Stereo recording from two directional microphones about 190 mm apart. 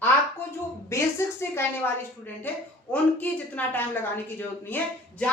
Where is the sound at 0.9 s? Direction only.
15° left (ahead or behind).